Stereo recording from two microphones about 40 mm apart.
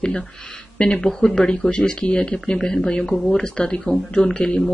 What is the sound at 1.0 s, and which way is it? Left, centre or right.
Speech, left.